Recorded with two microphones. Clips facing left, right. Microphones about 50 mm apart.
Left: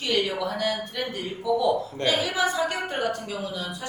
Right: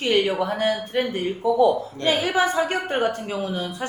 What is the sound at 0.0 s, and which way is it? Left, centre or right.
A woman's voice, right.